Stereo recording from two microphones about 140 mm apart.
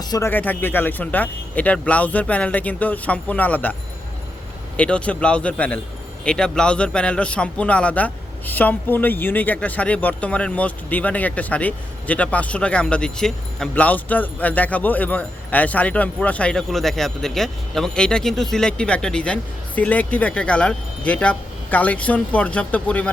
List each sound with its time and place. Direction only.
0.0 s speech: 30° left (ahead or behind)
0.3 s a man's voice: 15° left (ahead or behind)
4.8 s a man's voice: 10° left (ahead or behind)